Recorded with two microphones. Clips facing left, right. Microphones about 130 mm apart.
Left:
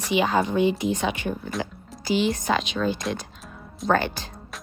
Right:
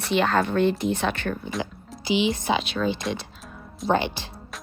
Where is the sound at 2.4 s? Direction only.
5° right (ahead or behind).